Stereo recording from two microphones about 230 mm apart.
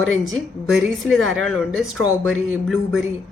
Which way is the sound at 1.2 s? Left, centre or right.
Right.